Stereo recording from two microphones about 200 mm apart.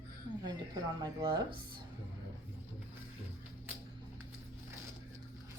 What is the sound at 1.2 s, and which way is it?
Speech, 20° right (ahead or behind).